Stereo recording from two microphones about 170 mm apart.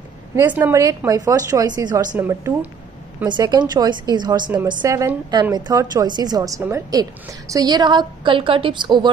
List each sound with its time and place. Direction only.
0.4 s a woman's voice: 10° right (ahead or behind)
2.1 s a woman's voice: 15° right (ahead or behind)
3.3 s a woman's voice: 25° right (ahead or behind)